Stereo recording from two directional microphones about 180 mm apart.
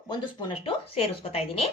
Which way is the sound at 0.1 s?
25° left (ahead or behind).